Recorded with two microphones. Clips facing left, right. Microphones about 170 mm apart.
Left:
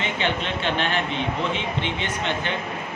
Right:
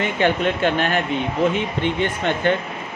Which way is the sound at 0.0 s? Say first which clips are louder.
Right 7 dB; 45° right (ahead or behind).